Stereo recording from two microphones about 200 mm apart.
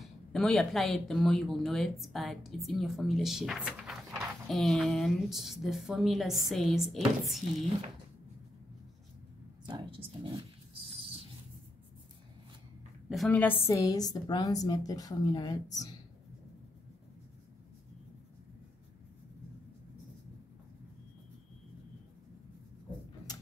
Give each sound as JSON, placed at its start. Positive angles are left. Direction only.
{"t": 0.0, "sound": "speech", "side_deg": 0}
{"t": 9.7, "sound": "a sound", "side_deg": -25}
{"t": 13.1, "sound": "a woman's voice", "side_deg": 5}
{"t": 13.7, "sound": "a woman's voice", "side_deg": 20}